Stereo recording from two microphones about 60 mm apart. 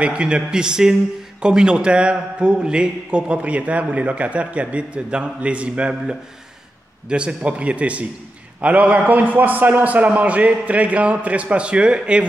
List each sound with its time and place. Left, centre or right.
0.0 s a man's voice: centre